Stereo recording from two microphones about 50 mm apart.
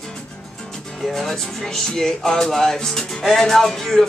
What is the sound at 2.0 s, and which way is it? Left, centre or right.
Music, centre.